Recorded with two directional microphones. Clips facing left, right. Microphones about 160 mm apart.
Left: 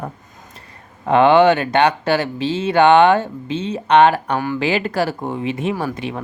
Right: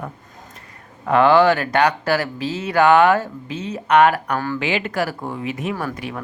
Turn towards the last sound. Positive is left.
turn(degrees=25)  # may be behind; listen again after turning